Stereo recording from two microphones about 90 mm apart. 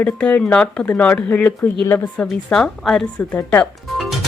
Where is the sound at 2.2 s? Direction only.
5° left (ahead or behind).